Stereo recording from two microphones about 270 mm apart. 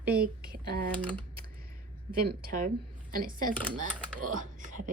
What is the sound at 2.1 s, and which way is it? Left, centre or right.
A woman's voice, right.